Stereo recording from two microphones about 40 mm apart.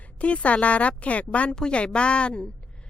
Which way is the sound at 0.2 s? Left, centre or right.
Left.